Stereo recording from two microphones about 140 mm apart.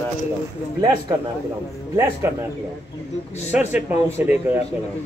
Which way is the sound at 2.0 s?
20° right (ahead or behind).